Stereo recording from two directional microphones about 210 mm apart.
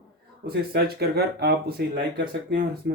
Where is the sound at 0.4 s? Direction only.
50° right (ahead or behind).